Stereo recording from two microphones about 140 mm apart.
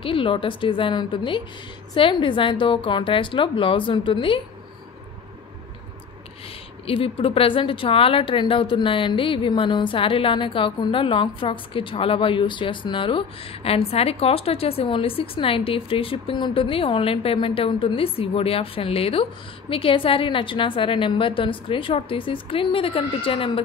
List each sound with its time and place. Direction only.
0.0 s speech: 40° left (ahead or behind)
6.9 s speech: 40° left (ahead or behind)